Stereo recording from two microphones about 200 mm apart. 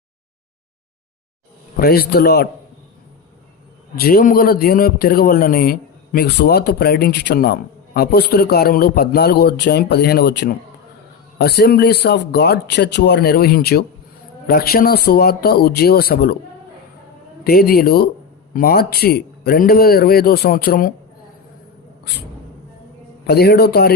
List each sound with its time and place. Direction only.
1.7 s a man's voice: 50° left (ahead or behind)
3.9 s a man's voice: 50° left (ahead or behind)
17.4 s a man's voice: 45° left (ahead or behind)
23.2 s a man's voice: 50° left (ahead or behind)